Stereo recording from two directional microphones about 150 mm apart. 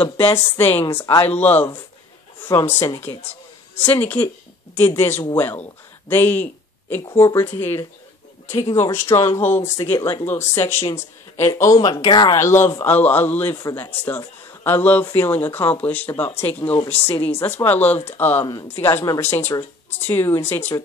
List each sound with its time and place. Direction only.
0.3 s speech: 15° left (ahead or behind)
6.0 s a sound: 15° left (ahead or behind)
7.2 s speech: 15° left (ahead or behind)
9.9 s speech: 25° left (ahead or behind)
18.4 s speech: 25° left (ahead or behind)